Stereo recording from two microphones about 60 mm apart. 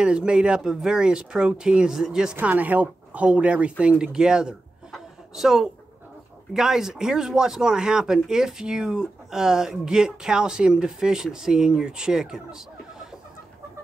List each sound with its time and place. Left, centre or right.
0.0 s speech: centre
2.4 s speech: right
4.9 s a sound: centre
6.5 s speech: centre